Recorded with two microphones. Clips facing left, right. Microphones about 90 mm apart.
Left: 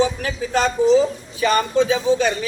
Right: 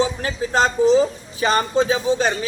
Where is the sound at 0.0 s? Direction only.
30° right (ahead or behind).